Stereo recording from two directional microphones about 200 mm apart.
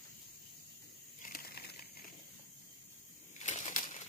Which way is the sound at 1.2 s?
45° left (ahead or behind).